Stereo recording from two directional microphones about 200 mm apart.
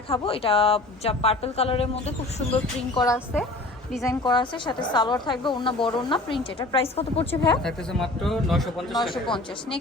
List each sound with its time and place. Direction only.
0.1 s a woman's voice: 30° left (ahead or behind)
7.6 s a man's voice: centre (ahead or behind)
9.2 s a woman's voice: 25° left (ahead or behind)